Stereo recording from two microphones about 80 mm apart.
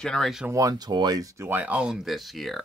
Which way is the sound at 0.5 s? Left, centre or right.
Right.